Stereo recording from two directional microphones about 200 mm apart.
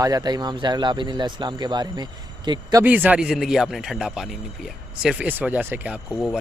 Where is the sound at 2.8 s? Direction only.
10° right (ahead or behind).